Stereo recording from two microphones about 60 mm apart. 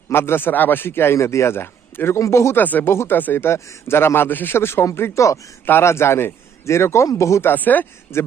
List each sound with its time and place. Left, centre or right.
0.1 s speech: left
2.1 s a man's voice: left
2.6 s speech: left
2.9 s a man's voice: left
3.2 s a man's voice: left
7.4 s speech: left